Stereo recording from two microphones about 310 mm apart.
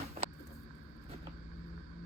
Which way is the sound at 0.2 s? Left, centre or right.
Right.